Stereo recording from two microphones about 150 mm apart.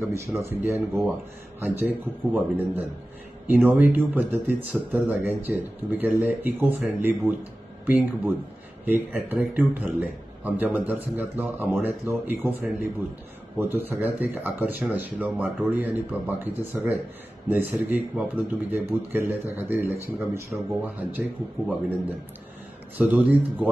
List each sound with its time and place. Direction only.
0.4 s a man's voice: 15° right (ahead or behind)